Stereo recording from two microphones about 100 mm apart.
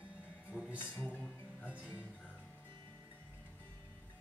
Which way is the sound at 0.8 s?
20° left (ahead or behind).